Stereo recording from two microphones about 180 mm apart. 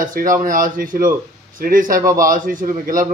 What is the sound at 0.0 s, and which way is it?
Speech, 50° right (ahead or behind).